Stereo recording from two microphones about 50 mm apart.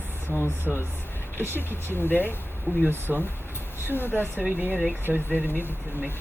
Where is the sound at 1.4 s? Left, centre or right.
Right.